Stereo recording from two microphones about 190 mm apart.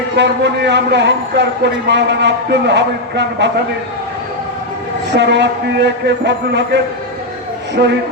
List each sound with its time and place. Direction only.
0.2 s a man's voice: 65° right (ahead or behind)
5.1 s a man's voice: 65° right (ahead or behind)
7.8 s a man's voice: 55° right (ahead or behind)